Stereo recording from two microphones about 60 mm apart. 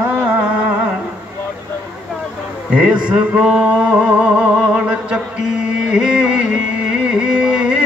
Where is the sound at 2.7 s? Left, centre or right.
Right.